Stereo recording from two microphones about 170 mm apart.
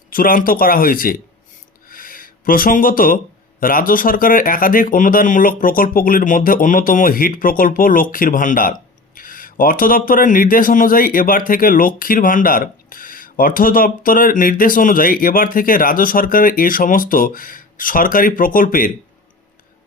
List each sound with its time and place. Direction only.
0.1 s speech: 55° left (ahead or behind)
1.9 s a sound: 55° left (ahead or behind)
3.6 s speech: 55° left (ahead or behind)